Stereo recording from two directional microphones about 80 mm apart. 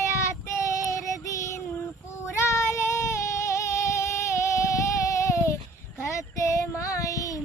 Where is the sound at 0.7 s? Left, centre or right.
Left.